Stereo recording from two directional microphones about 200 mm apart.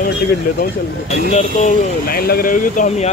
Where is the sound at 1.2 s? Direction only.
35° left (ahead or behind).